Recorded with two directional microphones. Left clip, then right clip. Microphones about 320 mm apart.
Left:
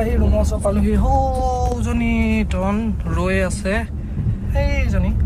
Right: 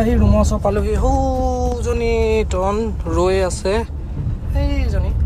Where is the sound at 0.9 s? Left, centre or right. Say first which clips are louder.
Right 1 dB; centre.